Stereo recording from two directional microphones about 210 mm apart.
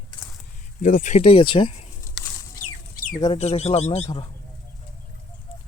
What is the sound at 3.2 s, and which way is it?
Speech, 25° left (ahead or behind).